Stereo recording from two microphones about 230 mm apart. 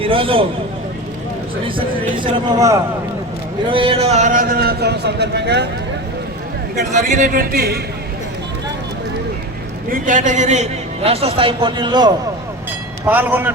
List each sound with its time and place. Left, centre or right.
0.0 s a man's voice: right
1.6 s a man's voice: right
6.7 s a man's voice: right
9.9 s a man's voice: right; by 12.1 s centre
13.1 s a man's voice: centre